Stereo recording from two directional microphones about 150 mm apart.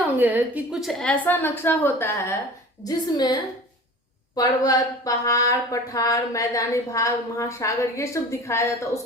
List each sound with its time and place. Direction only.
0.2 s a woman's voice: 10° right (ahead or behind); by 2.1 s 15° left (ahead or behind)
2.8 s speech: 30° left (ahead or behind)